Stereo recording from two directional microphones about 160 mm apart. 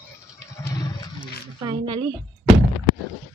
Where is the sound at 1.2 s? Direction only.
30° right (ahead or behind).